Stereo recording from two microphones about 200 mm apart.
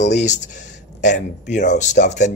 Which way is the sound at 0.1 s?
35° left (ahead or behind).